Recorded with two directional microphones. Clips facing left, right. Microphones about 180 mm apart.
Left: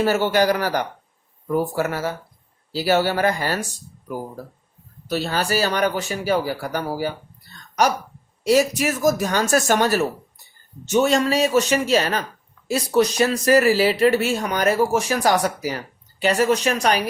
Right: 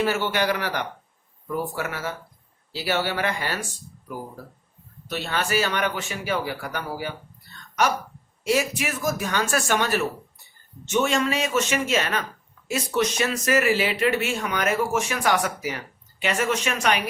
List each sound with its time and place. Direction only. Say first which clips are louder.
0.0 s speech: left 5 dB; 40° left (ahead or behind)
5.0 s speech: left 5 dB; 35° left (ahead or behind)
8.4 s speech: left 6 dB; 40° left (ahead or behind)